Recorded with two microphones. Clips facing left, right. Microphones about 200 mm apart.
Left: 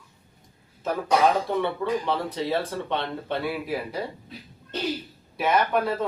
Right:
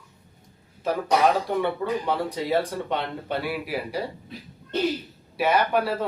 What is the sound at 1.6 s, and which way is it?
Speech, 10° right (ahead or behind).